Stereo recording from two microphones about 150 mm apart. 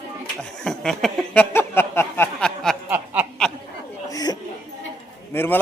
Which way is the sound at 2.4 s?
Centre (ahead or behind).